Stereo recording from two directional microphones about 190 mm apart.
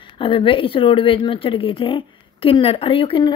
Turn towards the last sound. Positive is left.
turn(degrees=25)  # may be behind; listen again after turning